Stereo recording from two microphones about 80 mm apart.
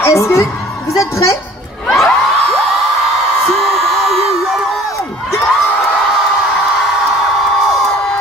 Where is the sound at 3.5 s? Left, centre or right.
Centre.